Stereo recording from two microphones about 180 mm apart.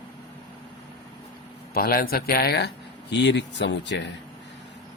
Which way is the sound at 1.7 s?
55° left (ahead or behind).